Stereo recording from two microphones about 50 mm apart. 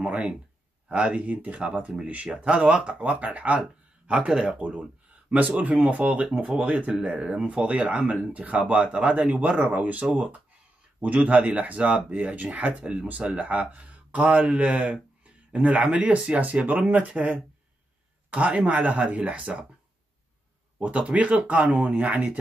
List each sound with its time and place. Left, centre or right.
0.0 s speech: right
5.6 s speech: right
16.3 s speech: right
20.8 s speech: right